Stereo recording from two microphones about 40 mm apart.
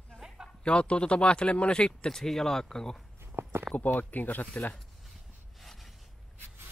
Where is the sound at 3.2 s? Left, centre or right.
Right.